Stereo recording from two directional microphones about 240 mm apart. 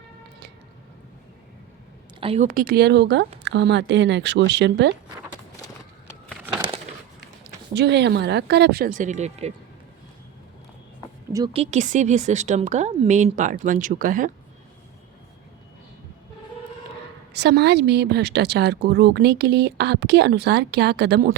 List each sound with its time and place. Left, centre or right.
2.2 s a woman's voice: right
7.7 s a woman's voice: right
11.3 s a woman's voice: centre
11.5 s a woman's voice: right
17.3 s a woman's voice: right